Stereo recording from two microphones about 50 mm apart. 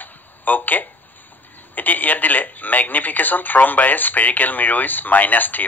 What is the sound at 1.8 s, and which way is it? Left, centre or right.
Speech, left.